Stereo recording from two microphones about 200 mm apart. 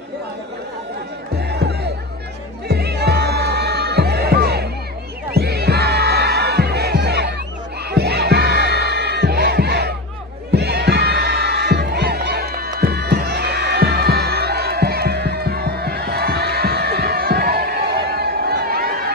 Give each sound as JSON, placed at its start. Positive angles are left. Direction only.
{"t": 1.4, "sound": "music", "side_deg": -55}
{"t": 10.5, "sound": "crowd", "side_deg": -55}